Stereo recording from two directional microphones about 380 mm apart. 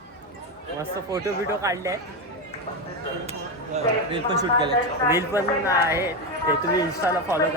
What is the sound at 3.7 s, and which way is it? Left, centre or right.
A man's voice, centre.